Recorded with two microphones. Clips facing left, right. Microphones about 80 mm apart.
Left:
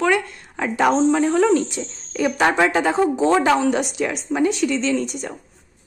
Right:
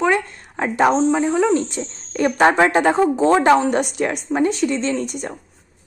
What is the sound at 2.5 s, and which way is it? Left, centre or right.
Speech, right.